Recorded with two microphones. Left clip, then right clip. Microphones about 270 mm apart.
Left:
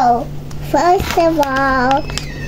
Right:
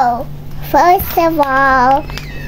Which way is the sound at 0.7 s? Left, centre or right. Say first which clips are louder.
Right 3 dB; right.